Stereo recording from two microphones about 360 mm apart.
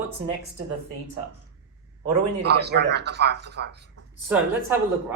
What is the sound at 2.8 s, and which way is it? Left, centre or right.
Speech, right.